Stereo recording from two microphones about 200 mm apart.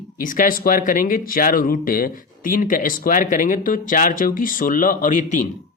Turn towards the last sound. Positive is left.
turn(degrees=40)  # may be behind; listen again after turning